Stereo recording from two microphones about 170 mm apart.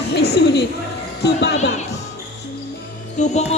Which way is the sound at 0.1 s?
75° left (ahead or behind).